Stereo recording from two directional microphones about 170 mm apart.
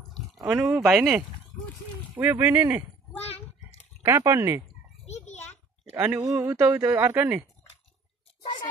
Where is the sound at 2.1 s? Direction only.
15° right (ahead or behind).